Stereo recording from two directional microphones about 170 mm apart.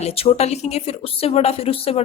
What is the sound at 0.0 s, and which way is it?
A woman's voice, 35° left (ahead or behind).